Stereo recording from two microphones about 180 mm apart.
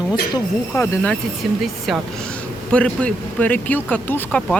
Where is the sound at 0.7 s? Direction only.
10° left (ahead or behind).